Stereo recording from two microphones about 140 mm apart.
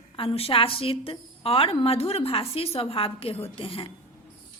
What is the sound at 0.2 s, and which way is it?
A woman's voice, 40° left (ahead or behind).